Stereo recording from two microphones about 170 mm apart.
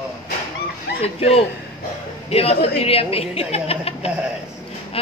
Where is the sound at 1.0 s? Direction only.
35° left (ahead or behind).